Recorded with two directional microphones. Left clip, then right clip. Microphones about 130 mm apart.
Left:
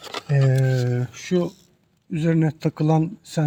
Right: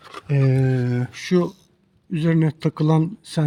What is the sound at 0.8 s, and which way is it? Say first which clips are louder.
Speech: right 1 dB; 45° right (ahead or behind).